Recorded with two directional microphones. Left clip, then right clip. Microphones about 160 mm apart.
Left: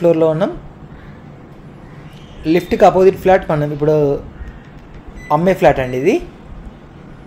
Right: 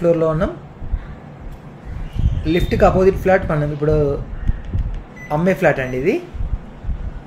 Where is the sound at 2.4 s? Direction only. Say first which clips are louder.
Left 4 dB; 40° left (ahead or behind).